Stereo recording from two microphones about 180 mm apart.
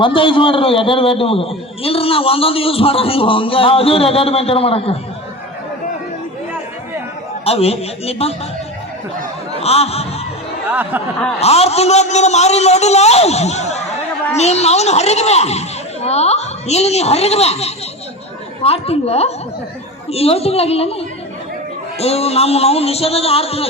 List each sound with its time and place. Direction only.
0.0 s a man's voice: 30° left (ahead or behind)
7.4 s a man's voice: 35° left (ahead or behind)
9.6 s speech: 35° left (ahead or behind)
10.7 s speech: 10° right (ahead or behind)
11.3 s a man's voice: 35° left (ahead or behind)